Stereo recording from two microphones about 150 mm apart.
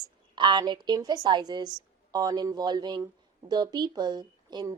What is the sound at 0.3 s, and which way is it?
A woman's voice, 30° right (ahead or behind).